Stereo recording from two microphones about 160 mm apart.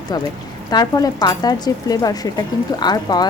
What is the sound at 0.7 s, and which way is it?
Speech, 25° left (ahead or behind).